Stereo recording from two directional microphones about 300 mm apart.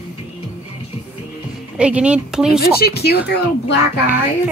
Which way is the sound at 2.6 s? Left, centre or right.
Left.